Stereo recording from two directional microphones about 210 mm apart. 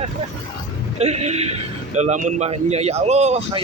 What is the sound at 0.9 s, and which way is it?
A man's voice, 30° right (ahead or behind).